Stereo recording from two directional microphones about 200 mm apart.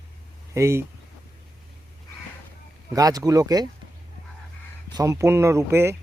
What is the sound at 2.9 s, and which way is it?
Speech, 20° right (ahead or behind).